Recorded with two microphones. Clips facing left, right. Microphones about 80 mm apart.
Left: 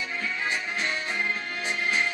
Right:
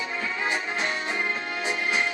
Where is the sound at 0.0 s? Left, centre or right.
Right.